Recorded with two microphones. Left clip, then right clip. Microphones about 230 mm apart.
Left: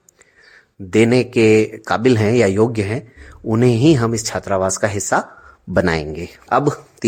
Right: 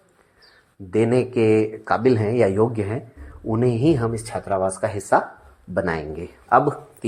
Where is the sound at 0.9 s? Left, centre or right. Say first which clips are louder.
Left 5 dB; left.